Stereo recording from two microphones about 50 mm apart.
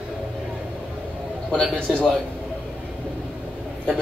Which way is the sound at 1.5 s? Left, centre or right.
Centre.